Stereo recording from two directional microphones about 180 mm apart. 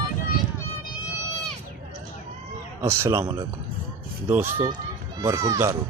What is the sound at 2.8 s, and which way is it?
Speech, 15° right (ahead or behind).